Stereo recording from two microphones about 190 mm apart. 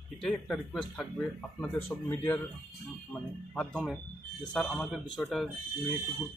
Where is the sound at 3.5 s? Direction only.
5° left (ahead or behind).